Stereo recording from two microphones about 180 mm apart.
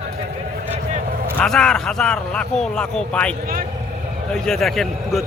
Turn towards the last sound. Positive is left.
turn(degrees=0)  # may be behind; listen again after turning